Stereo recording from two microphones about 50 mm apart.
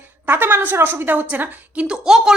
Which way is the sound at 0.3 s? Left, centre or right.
Right.